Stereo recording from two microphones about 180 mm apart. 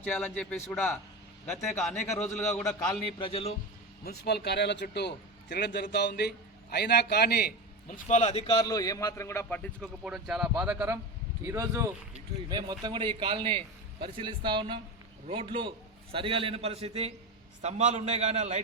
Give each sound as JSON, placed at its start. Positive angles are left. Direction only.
{"t": 0.0, "sound": "a man's voice", "side_deg": 5}
{"t": 2.1, "sound": "a man's voice", "side_deg": 5}
{"t": 3.2, "sound": "speech", "side_deg": 30}
{"t": 4.0, "sound": "a man's voice", "side_deg": 65}
{"t": 8.0, "sound": "speech", "side_deg": 40}
{"t": 8.4, "sound": "a man's voice", "side_deg": 20}
{"t": 10.0, "sound": "a man's voice", "side_deg": 0}